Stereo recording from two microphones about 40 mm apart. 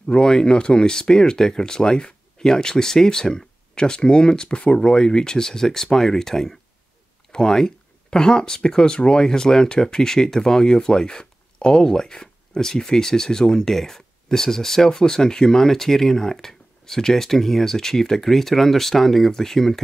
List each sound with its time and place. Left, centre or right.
0.1 s speech: centre